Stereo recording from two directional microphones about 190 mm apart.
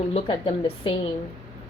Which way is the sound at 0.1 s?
30° left (ahead or behind).